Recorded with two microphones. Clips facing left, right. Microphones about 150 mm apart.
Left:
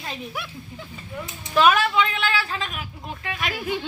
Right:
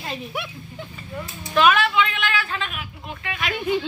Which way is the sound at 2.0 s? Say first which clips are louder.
Even; 35° left (ahead or behind).